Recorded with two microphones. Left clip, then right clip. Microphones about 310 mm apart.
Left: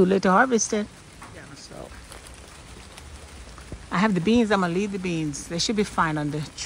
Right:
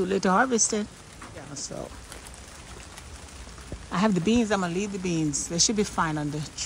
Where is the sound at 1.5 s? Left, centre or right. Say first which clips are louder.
Right 8 dB; centre.